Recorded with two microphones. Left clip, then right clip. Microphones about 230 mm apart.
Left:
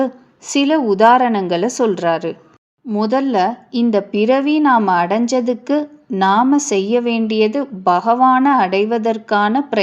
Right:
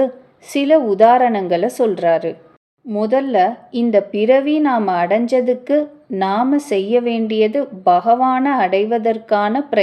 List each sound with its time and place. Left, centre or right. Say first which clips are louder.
0.0 s a woman's voice: right 2 dB; centre